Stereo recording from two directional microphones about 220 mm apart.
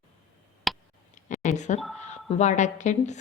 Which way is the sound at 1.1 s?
30° left (ahead or behind).